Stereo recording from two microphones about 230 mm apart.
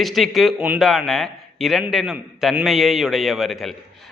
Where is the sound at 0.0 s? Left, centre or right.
Centre.